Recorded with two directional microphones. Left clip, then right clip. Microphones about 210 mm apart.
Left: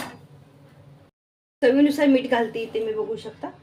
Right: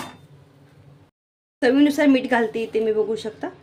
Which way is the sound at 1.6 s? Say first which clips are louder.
Right 1 dB; 30° right (ahead or behind).